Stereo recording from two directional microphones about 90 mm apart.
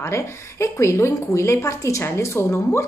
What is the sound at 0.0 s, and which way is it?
A woman's voice, 30° left (ahead or behind).